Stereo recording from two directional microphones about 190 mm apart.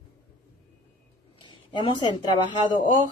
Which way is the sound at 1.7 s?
20° left (ahead or behind).